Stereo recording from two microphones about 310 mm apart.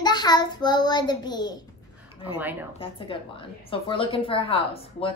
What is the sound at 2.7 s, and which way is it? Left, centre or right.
A woman's voice, centre.